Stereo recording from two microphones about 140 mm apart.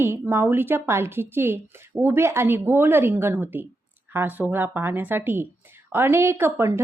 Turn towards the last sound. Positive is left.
turn(degrees=-20)  # may be behind; listen again after turning